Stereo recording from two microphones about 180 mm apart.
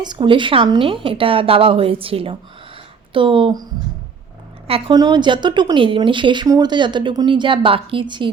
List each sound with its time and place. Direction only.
0.0 s a woman's voice: 25° right (ahead or behind)